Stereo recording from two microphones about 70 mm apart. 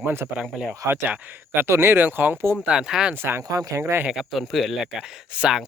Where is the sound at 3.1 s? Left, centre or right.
Right.